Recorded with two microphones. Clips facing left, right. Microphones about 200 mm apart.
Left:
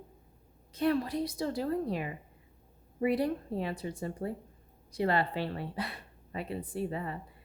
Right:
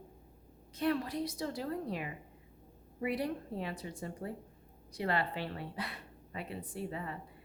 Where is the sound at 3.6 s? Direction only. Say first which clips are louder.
Left 5 dB; 30° left (ahead or behind).